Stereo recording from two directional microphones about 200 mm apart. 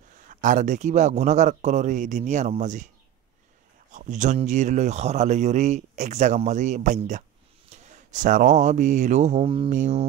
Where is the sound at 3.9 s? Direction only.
35° right (ahead or behind).